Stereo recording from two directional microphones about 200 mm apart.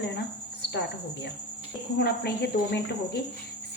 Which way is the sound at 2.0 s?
55° left (ahead or behind).